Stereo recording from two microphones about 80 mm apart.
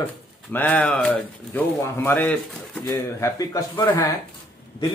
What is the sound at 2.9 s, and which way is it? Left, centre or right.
Speech, left.